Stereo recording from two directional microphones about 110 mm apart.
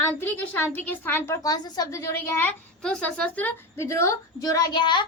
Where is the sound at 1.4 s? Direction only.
35° left (ahead or behind); by 2.5 s 20° left (ahead or behind).